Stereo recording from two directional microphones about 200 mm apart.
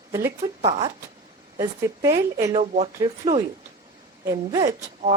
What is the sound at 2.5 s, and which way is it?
Speech, 35° right (ahead or behind).